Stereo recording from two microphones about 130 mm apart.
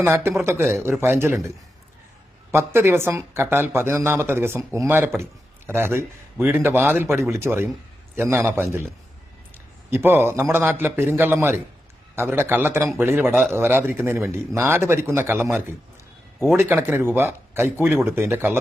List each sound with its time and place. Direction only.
0.0 s a man's voice: 20° right (ahead or behind)
9.9 s a man's voice: 15° right (ahead or behind)